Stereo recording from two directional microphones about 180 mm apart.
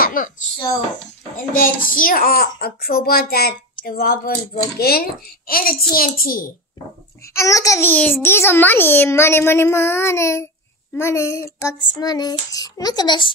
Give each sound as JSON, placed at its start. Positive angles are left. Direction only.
{"t": 0.0, "sound": "a sound", "side_deg": 50}
{"t": 0.6, "sound": "a child's voice", "side_deg": 20}
{"t": 1.5, "sound": "a child's voice", "side_deg": 50}
{"t": 7.3, "sound": "a child's voice", "side_deg": 20}